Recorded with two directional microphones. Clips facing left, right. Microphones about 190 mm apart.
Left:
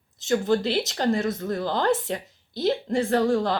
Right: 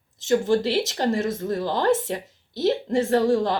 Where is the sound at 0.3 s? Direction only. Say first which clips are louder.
Right 2 dB; 25° right (ahead or behind).